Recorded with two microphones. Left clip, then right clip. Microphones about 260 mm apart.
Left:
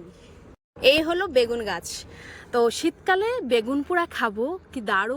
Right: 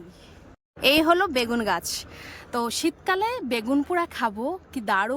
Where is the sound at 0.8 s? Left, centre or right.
Centre.